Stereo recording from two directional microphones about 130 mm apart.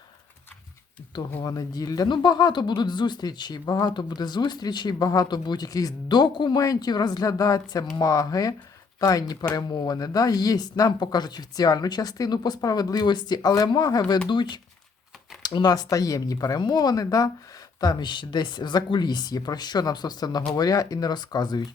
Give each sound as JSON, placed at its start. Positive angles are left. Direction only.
{"t": 1.4, "sound": "speech", "side_deg": 30}